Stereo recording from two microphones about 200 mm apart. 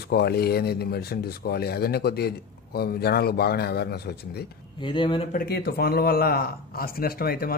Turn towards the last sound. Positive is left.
turn(degrees=50)  # may be behind; listen again after turning